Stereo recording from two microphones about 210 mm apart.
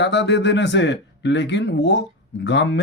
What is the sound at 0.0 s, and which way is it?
Speech, 55° left (ahead or behind).